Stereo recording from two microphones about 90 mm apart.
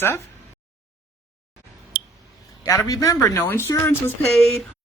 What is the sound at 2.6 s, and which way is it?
Speech, 40° left (ahead or behind).